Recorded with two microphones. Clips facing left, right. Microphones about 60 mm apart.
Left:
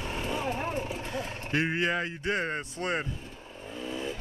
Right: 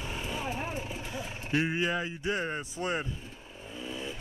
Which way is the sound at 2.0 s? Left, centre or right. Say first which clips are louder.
Left 2 dB; left.